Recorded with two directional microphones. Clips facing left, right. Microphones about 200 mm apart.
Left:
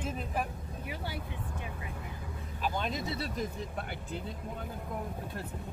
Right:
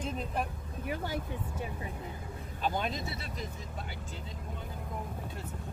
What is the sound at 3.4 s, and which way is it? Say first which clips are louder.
Speech: left 5 dB; 55° left (ahead or behind).